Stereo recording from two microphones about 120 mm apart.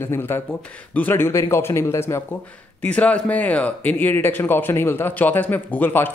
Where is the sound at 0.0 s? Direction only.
20° left (ahead or behind).